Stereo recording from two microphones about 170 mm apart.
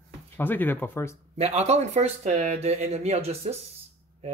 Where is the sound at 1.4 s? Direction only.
40° right (ahead or behind).